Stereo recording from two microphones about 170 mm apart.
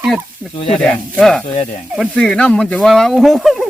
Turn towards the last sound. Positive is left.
turn(degrees=0)  # may be behind; listen again after turning